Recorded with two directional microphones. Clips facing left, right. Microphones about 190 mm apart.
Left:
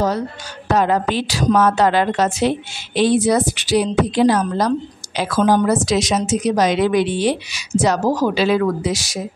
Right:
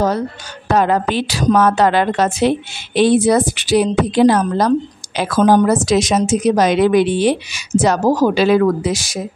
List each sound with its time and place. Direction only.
0.7 s a woman's voice: 60° right (ahead or behind)